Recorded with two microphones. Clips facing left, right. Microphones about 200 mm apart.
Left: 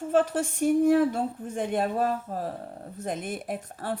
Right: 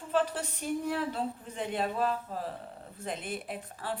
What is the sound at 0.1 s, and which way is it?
Speech, 50° left (ahead or behind).